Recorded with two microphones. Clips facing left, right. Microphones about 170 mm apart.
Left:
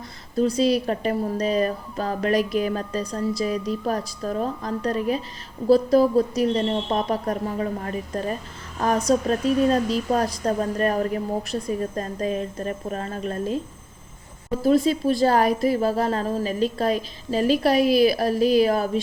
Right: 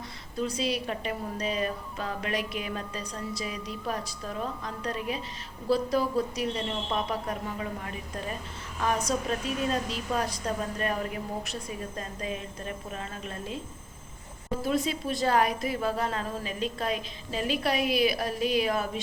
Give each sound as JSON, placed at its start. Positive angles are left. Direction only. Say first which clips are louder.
{"t": 0.3, "sound": "a woman's voice", "louder": "left 10 dB", "side_deg": 35}
{"t": 14.6, "sound": "a woman's voice", "louder": "left 10 dB", "side_deg": 35}